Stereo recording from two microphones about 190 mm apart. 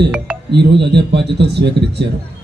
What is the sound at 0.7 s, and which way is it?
A man's voice, 60° right (ahead or behind).